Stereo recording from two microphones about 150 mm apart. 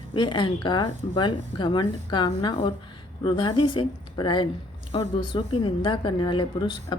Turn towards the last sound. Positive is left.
turn(degrees=30)  # may be behind; listen again after turning